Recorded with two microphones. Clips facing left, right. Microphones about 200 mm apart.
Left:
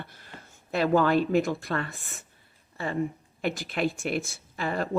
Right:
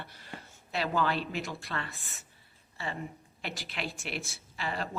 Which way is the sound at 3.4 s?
50° left (ahead or behind).